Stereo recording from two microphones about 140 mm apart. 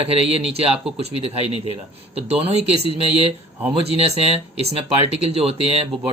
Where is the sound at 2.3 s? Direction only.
45° right (ahead or behind).